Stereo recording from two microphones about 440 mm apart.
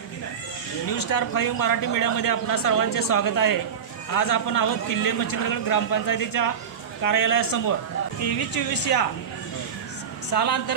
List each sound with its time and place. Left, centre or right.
0.9 s speech: left
10.3 s speech: left